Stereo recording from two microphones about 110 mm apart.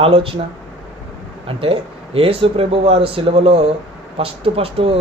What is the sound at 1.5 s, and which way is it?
Speech, 60° right (ahead or behind).